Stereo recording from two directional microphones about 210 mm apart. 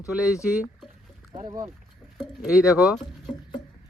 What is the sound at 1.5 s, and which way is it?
Speech, 20° right (ahead or behind).